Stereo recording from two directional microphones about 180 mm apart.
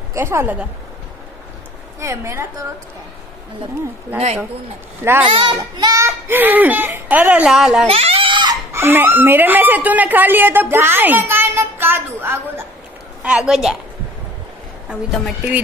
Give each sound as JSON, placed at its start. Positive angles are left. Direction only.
{"t": 0.1, "sound": "a woman's voice", "side_deg": -15}
{"t": 2.0, "sound": "a woman's voice", "side_deg": -15}
{"t": 5.3, "sound": "a woman's voice", "side_deg": -25}
{"t": 7.8, "sound": "a sound", "side_deg": -35}
{"t": 8.7, "sound": "a woman's voice", "side_deg": -10}
{"t": 14.9, "sound": "a woman's voice", "side_deg": -5}